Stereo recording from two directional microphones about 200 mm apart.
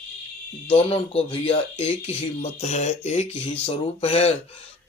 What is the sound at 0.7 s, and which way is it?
Speech, 25° left (ahead or behind).